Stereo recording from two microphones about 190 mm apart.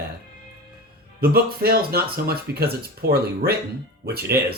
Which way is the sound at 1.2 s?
55° right (ahead or behind).